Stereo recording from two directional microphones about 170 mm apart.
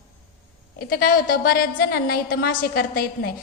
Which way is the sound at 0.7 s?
60° left (ahead or behind).